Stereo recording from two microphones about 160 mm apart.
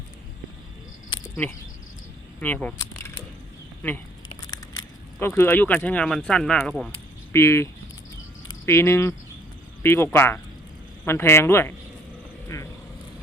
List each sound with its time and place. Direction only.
2.4 s speech: 10° left (ahead or behind)
2.7 s a sound: 15° left (ahead or behind)
5.2 s speech: 15° left (ahead or behind)
7.3 s speech: 15° left (ahead or behind)